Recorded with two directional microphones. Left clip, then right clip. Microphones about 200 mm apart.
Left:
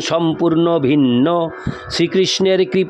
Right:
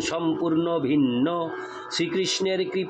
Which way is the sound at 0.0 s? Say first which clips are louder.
Left 9 dB; 45° left (ahead or behind).